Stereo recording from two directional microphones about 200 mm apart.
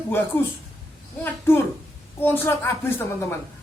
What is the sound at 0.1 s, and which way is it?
A woman's voice, 10° left (ahead or behind).